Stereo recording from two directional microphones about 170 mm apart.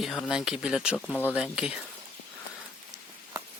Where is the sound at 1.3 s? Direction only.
5° right (ahead or behind).